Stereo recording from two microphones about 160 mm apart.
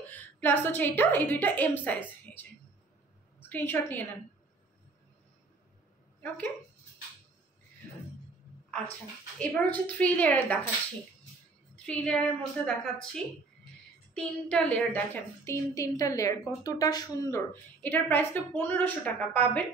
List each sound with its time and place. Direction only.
0.0 s a woman's voice: 10° left (ahead or behind)
9.4 s a woman's voice: 10° left (ahead or behind)
11.7 s a woman's voice: 5° left (ahead or behind)
15.7 s a woman's voice: 20° left (ahead or behind)
17.8 s a woman's voice: 10° left (ahead or behind)